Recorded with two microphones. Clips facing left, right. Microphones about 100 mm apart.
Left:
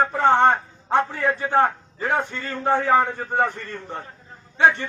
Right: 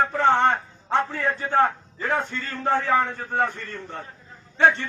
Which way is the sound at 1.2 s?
15° left (ahead or behind).